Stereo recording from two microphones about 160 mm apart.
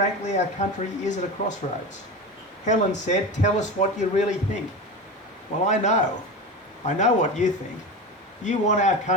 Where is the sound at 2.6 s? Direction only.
50° left (ahead or behind).